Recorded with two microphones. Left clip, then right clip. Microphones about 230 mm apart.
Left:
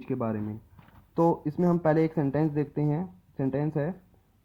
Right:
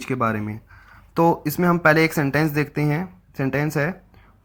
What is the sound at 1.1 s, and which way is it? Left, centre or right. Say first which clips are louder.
Speech: right 6 dB; right.